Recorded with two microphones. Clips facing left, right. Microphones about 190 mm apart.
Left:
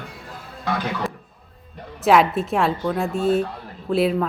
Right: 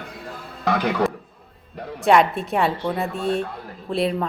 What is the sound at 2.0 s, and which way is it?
Speech, centre (ahead or behind).